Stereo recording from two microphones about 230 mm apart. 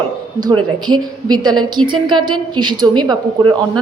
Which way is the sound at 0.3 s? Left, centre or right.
Centre.